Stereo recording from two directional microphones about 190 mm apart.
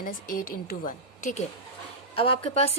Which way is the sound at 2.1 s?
30° left (ahead or behind).